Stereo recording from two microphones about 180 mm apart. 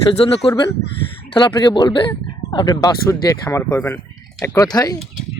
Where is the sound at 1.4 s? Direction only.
25° left (ahead or behind).